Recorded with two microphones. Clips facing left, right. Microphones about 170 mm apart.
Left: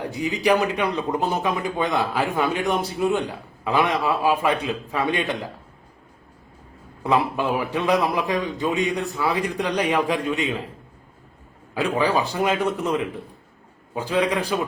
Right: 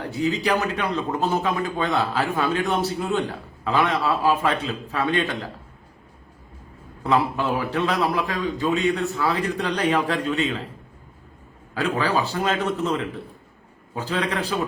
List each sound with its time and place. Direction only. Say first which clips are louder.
0.1 s a man's voice: left 1 dB; 15° left (ahead or behind)
7.0 s a man's voice: even; 15° left (ahead or behind)
11.7 s a man's voice: left 2 dB; 15° left (ahead or behind)